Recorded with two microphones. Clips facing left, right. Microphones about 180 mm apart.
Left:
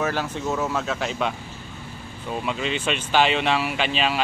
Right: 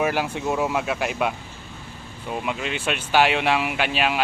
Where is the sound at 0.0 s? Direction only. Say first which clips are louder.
Right 2 dB; 10° right (ahead or behind).